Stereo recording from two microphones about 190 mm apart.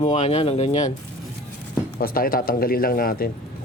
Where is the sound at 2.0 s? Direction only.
50° left (ahead or behind).